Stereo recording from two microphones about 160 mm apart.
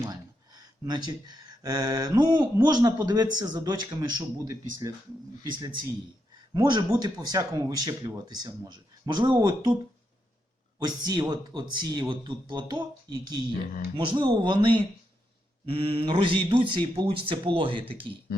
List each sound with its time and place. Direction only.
0.0 s speech: 25° right (ahead or behind)
10.8 s speech: 25° right (ahead or behind)